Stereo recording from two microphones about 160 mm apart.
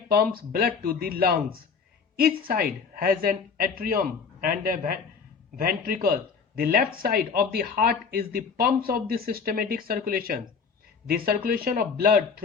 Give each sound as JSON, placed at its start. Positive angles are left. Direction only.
{"t": 0.1, "sound": "speech", "side_deg": -70}
{"t": 11.4, "sound": "speech", "side_deg": -70}